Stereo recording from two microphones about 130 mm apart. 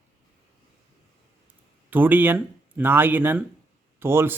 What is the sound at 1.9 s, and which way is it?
A man's voice, 15° right (ahead or behind).